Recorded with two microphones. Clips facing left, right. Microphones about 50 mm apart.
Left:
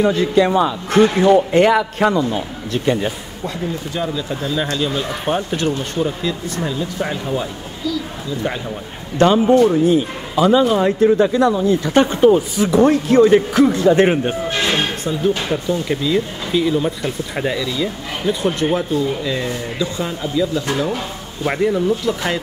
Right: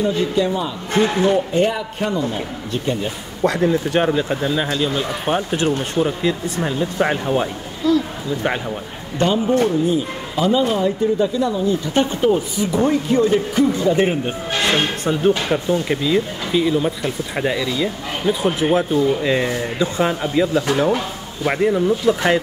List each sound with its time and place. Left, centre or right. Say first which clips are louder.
0.0 s a man's voice: left 4 dB; left
3.4 s speech: right 8 dB; right
4.6 s speech: even; centre
6.3 s speech: right 2 dB; right
9.2 s speech: left 5 dB; left
14.7 s speech: right 1 dB; right
15.9 s speech: even; centre
18.9 s speech: right 3 dB; right
21.5 s speech: even; centre
22.0 s speech: right 4 dB; right